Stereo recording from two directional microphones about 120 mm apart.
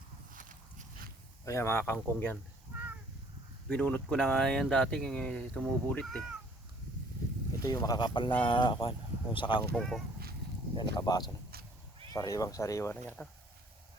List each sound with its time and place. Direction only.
0.3 s a sound: 90° right
1.5 s speech: 25° left (ahead or behind)
3.7 s speech: 10° left (ahead or behind)
7.6 s speech: 30° left (ahead or behind)
9.7 s speech: 5° left (ahead or behind)
10.8 s speech: 35° left (ahead or behind)
12.9 s speech: 15° left (ahead or behind)